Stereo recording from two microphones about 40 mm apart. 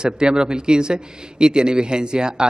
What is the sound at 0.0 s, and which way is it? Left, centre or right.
Speech, right.